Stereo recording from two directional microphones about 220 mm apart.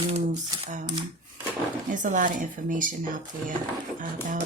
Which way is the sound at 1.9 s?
35° right (ahead or behind).